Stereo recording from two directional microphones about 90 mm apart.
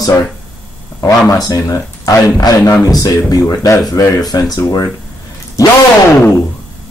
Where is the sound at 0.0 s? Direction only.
40° left (ahead or behind).